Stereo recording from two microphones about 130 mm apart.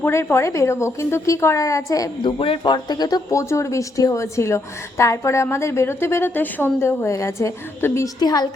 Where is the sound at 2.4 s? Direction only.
40° left (ahead or behind); by 8.1 s 20° left (ahead or behind).